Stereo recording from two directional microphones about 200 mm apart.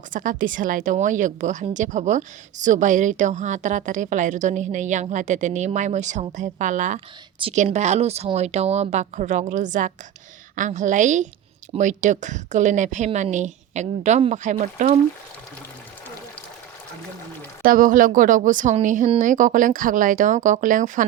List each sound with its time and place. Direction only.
0.1 s a woman's voice: 40° right (ahead or behind)
17.6 s a woman's voice: 45° right (ahead or behind)